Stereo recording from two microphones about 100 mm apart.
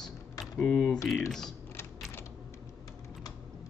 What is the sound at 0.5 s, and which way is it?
Speech, 10° left (ahead or behind).